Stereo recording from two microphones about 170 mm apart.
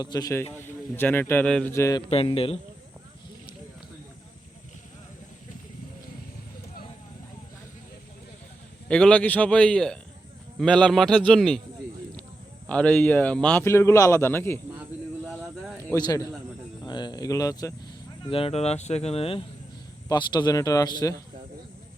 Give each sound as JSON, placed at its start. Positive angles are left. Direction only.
{"t": 0.0, "sound": "speech", "side_deg": 25}
{"t": 1.7, "sound": "speech", "side_deg": 20}
{"t": 2.0, "sound": "speech", "side_deg": 35}
{"t": 8.9, "sound": "a man's voice", "side_deg": 5}
{"t": 12.6, "sound": "speech", "side_deg": 5}
{"t": 15.3, "sound": "a sound", "side_deg": 0}
{"t": 15.8, "sound": "a man's voice", "side_deg": 20}
{"t": 18.3, "sound": "speech", "side_deg": 35}